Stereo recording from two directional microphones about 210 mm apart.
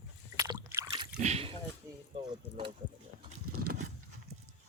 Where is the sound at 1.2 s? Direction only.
30° right (ahead or behind).